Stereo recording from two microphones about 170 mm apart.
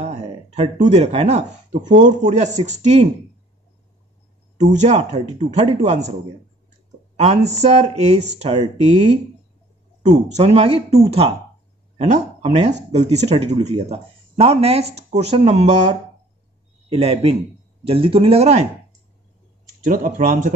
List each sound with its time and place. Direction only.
0.0 s speech: 40° right (ahead or behind)
4.6 s speech: 45° right (ahead or behind)
7.2 s speech: 40° right (ahead or behind)
10.3 s speech: 40° right (ahead or behind)
19.8 s speech: 50° right (ahead or behind)